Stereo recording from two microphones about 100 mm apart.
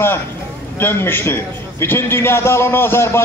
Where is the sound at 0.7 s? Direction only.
20° left (ahead or behind).